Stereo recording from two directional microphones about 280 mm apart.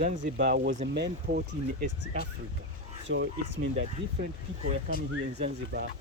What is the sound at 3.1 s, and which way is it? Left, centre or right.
Speech, right.